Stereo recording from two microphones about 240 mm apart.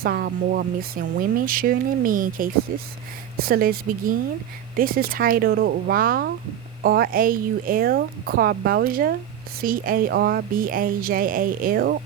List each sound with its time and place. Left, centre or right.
0.0 s speech: right